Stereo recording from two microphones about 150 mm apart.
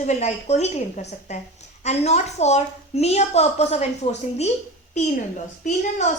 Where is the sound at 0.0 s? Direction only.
50° left (ahead or behind).